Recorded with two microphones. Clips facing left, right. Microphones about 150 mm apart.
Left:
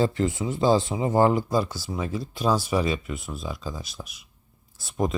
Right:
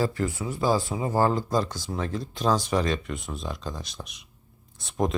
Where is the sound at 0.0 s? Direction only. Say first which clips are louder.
Left 3 dB; 20° left (ahead or behind).